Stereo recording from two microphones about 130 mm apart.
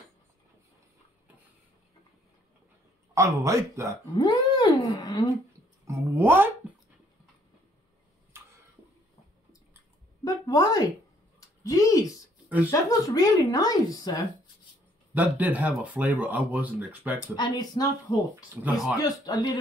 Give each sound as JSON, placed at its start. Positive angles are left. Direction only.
{"t": 3.2, "sound": "speech", "side_deg": -25}
{"t": 4.2, "sound": "speech", "side_deg": 35}
{"t": 5.9, "sound": "speech", "side_deg": -20}
{"t": 10.2, "sound": "a woman's voice", "side_deg": 30}
{"t": 11.3, "sound": "a sound", "side_deg": 25}
{"t": 12.7, "sound": "speech", "side_deg": 25}
{"t": 15.1, "sound": "speech", "side_deg": -10}
{"t": 17.2, "sound": "speech", "side_deg": 30}
{"t": 18.6, "sound": "speech", "side_deg": -10}
{"t": 18.9, "sound": "speech", "side_deg": 30}